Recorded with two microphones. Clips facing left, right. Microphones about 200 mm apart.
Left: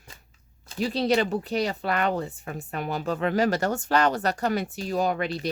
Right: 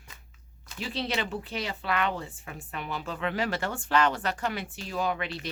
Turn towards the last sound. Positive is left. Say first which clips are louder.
# left 5 dB
turn(degrees=40)  # may be behind; listen again after turning